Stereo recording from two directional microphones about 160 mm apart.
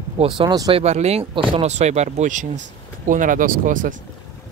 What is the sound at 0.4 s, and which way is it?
Speech, 25° right (ahead or behind).